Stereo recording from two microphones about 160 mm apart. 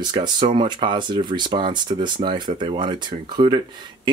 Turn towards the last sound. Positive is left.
turn(degrees=-30)  # may be behind; listen again after turning